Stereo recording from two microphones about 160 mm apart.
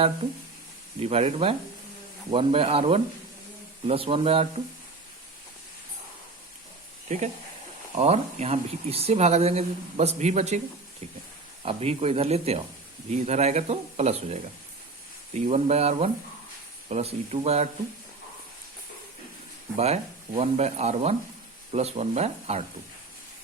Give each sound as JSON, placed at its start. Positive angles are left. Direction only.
{"t": 0.9, "sound": "speech", "side_deg": -40}
{"t": 7.9, "sound": "speech", "side_deg": -40}
{"t": 11.6, "sound": "speech", "side_deg": -40}
{"t": 15.4, "sound": "speech", "side_deg": -45}
{"t": 19.7, "sound": "speech", "side_deg": -40}